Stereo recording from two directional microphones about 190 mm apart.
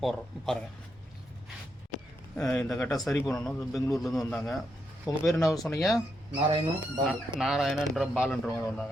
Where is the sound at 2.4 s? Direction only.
5° left (ahead or behind).